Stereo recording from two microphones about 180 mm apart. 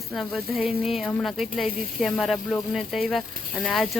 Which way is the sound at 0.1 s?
Centre (ahead or behind).